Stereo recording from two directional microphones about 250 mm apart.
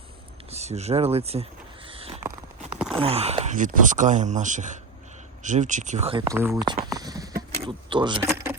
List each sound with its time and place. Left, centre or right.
0.5 s speech: right
1.9 s a sound: right
3.0 s speech: right
7.0 s vehicle: centre
7.5 s speech: right